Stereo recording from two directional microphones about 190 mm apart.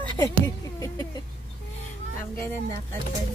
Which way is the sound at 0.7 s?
20° left (ahead or behind).